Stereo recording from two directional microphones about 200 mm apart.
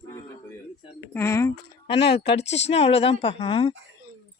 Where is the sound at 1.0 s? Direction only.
15° left (ahead or behind).